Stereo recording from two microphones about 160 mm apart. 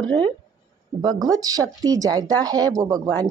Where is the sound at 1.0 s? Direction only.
25° right (ahead or behind).